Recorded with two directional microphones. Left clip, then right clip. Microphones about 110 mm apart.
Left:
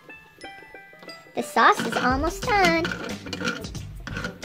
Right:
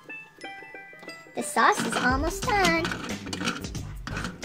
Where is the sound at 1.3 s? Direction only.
20° left (ahead or behind).